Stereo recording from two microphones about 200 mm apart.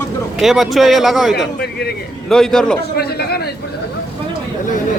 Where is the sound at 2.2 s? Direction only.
Centre (ahead or behind).